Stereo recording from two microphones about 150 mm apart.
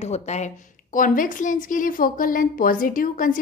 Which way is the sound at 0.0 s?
45° left (ahead or behind).